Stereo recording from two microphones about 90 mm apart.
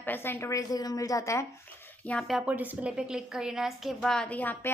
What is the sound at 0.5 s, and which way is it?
Speech, 45° left (ahead or behind).